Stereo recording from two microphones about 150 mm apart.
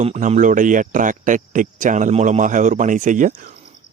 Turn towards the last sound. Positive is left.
turn(degrees=-55)  # may be behind; listen again after turning